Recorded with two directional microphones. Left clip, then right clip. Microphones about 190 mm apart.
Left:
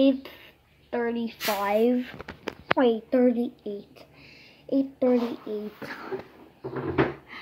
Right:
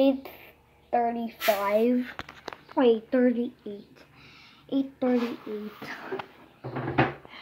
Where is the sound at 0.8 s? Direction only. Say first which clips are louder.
Right 3 dB; 35° left (ahead or behind).